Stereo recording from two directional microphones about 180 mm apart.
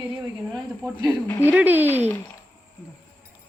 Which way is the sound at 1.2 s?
10° left (ahead or behind).